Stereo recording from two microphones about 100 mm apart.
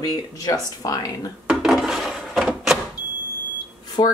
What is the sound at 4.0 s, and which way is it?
Speech, 65° left (ahead or behind).